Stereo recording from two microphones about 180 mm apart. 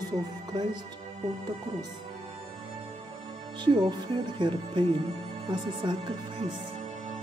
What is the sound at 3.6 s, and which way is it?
Speech, 25° right (ahead or behind).